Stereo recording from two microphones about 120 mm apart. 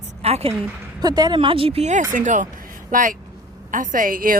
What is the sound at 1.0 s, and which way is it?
A woman's voice, 35° right (ahead or behind).